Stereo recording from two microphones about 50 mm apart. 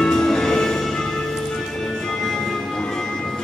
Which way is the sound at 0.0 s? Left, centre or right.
Centre.